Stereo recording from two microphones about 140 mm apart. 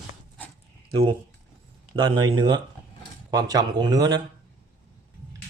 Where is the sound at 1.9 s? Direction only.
35° right (ahead or behind).